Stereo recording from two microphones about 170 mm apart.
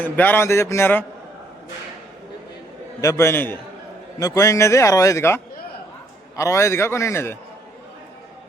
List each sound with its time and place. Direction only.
0.0 s a man's voice: 10° left (ahead or behind)
3.0 s a man's voice: 15° left (ahead or behind)